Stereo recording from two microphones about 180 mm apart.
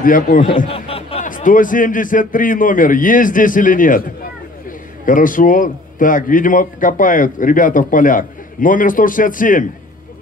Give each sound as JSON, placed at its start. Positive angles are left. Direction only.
{"t": 0.0, "sound": "a man's voice", "side_deg": 50}
{"t": 0.7, "sound": "a sound", "side_deg": 30}
{"t": 1.2, "sound": "a man's voice", "side_deg": 45}